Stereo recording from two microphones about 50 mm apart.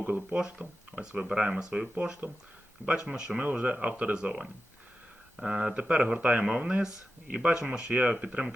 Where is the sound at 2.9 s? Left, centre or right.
Centre.